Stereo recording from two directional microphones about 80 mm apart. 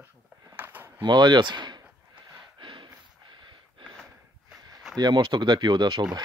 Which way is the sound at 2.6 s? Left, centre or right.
Right.